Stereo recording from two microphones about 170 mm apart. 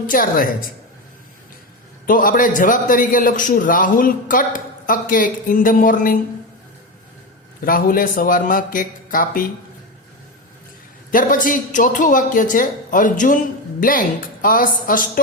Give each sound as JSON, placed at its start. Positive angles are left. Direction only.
{"t": 0.1, "sound": "a woman's voice", "side_deg": 55}
{"t": 2.0, "sound": "a man's voice", "side_deg": 55}
{"t": 7.6, "sound": "a man's voice", "side_deg": 55}
{"t": 11.1, "sound": "a man's voice", "side_deg": 55}